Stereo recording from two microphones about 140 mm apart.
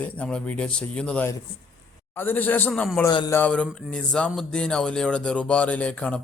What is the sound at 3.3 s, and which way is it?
A man's voice, 10° left (ahead or behind).